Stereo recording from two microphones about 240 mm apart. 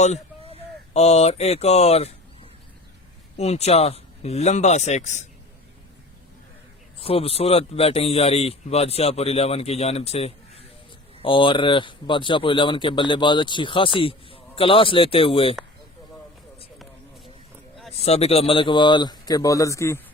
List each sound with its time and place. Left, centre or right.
0.0 s a sound: left
3.3 s speech: left
7.0 s speech: left
18.0 s speech: left